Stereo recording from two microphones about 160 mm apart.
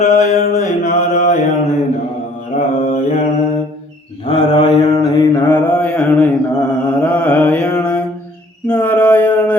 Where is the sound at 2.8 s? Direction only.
40° left (ahead or behind).